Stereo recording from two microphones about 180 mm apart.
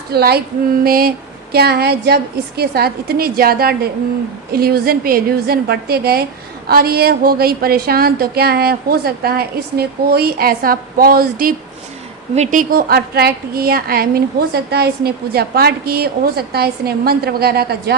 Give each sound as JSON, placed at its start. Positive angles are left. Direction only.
{"t": 0.1, "sound": "a woman's voice", "side_deg": -60}
{"t": 12.3, "sound": "a woman's voice", "side_deg": -40}